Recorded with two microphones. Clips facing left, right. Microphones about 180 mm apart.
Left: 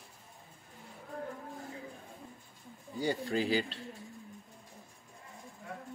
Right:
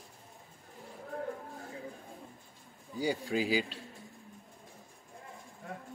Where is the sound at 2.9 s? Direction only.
10° right (ahead or behind).